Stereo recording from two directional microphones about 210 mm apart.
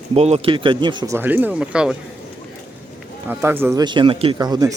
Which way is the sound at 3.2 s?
10° right (ahead or behind).